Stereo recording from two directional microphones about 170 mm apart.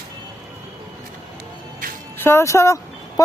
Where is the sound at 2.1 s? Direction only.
15° left (ahead or behind).